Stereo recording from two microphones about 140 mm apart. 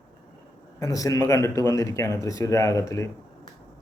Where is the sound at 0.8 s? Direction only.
25° left (ahead or behind).